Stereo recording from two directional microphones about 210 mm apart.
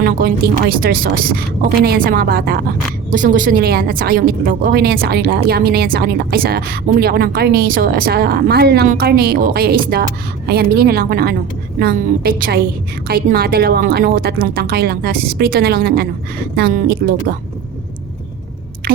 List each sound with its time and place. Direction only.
0.0 s a woman's voice: 45° right (ahead or behind)